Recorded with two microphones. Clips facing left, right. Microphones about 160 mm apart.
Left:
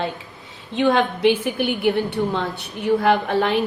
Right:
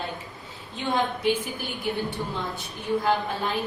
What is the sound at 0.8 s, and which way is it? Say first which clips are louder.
A woman's voice: left 8 dB; 70° left (ahead or behind).